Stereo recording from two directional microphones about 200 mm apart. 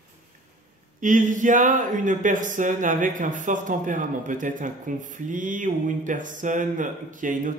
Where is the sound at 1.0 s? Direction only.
40° right (ahead or behind).